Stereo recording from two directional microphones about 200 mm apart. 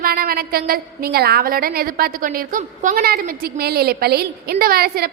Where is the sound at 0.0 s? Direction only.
50° right (ahead or behind).